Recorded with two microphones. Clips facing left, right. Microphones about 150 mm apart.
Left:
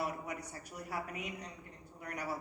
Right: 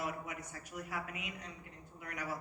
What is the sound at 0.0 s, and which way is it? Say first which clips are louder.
A man's voice: left 2 dB; 35° left (ahead or behind).